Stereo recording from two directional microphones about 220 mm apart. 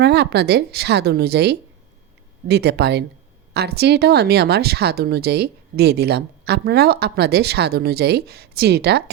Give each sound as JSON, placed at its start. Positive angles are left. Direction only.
{"t": 0.0, "sound": "speech", "side_deg": -50}